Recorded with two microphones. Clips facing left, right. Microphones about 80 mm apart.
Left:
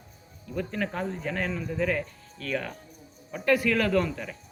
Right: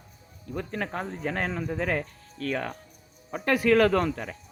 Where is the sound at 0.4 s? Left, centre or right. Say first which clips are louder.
Left 1 dB; right.